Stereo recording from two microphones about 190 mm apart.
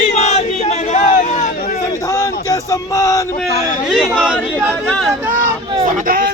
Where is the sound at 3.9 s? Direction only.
Centre (ahead or behind).